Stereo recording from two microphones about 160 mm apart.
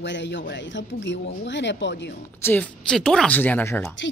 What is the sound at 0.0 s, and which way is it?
Speech, 90° left.